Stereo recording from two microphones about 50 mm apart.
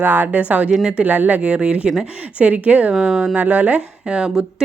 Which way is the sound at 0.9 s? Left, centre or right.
Right.